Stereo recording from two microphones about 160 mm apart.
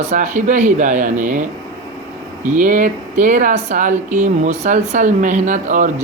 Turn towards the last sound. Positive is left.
turn(degrees=-50)  # may be behind; listen again after turning